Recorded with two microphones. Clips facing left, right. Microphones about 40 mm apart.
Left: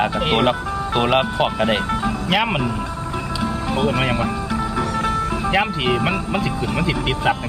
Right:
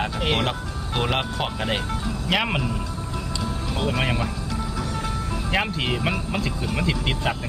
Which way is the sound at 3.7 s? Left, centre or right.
Centre.